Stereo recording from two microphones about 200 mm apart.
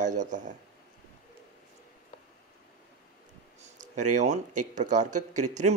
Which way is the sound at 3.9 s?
40° right (ahead or behind).